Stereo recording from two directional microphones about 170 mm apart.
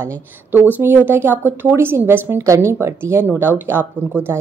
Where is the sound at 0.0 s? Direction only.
10° right (ahead or behind).